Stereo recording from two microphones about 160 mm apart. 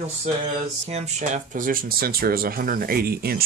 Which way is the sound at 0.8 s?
45° right (ahead or behind).